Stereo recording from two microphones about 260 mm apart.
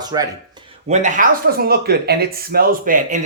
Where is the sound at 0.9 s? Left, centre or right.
Right.